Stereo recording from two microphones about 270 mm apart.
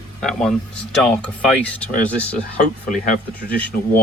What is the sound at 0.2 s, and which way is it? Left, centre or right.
Speech, centre.